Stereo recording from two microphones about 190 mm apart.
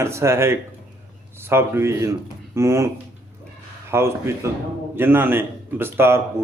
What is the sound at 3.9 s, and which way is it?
A man's voice, 15° right (ahead or behind).